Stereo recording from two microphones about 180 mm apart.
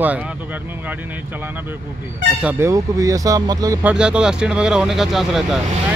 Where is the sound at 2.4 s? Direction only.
15° right (ahead or behind).